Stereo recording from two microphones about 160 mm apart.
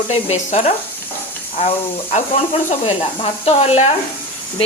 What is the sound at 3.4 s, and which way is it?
Speech, 40° left (ahead or behind).